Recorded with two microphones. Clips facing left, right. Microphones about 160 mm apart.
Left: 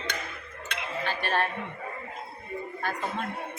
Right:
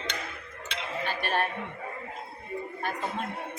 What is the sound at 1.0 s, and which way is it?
Music, 15° right (ahead or behind).